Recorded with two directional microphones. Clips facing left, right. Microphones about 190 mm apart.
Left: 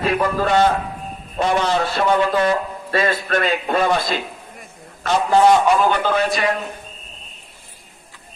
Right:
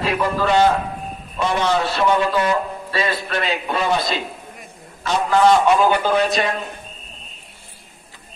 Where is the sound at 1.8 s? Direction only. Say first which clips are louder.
Left 1 dB; 50° left (ahead or behind).